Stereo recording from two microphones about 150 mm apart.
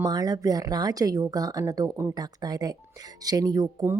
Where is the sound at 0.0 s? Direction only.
25° right (ahead or behind).